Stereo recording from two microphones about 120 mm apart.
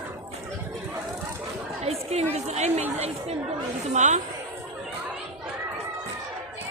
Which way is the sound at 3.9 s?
80° right.